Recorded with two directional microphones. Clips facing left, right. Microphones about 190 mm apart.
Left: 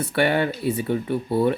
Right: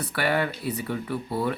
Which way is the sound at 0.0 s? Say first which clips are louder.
Left 5 dB; 25° left (ahead or behind).